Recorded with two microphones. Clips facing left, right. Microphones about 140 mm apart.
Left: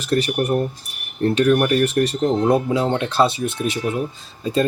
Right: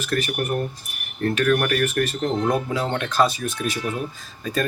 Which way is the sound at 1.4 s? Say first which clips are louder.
Left 4 dB; 25° left (ahead or behind).